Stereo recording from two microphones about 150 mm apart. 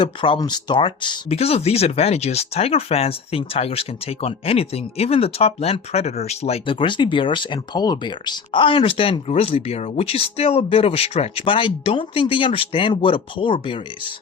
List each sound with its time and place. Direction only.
0.0 s speech: 35° left (ahead or behind)